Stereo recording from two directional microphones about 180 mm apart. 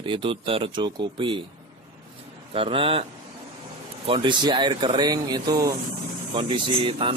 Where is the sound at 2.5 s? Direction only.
30° right (ahead or behind).